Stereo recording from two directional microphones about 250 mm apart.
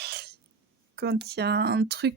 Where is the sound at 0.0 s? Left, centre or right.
Right.